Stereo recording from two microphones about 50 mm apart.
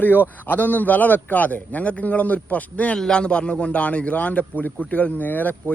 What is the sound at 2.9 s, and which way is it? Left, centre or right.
A man's voice, centre.